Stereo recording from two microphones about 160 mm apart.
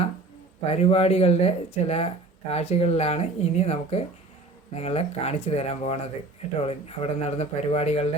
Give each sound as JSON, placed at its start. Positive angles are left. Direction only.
{"t": 0.6, "sound": "speech", "side_deg": 40}